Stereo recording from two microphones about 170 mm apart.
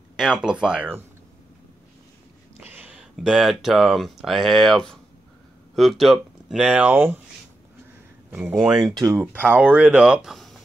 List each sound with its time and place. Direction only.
0.2 s speech: 5° right (ahead or behind)
2.5 s speech: 10° right (ahead or behind)
8.3 s speech: 5° right (ahead or behind)
8.9 s speech: 15° right (ahead or behind); by 10.5 s centre (ahead or behind)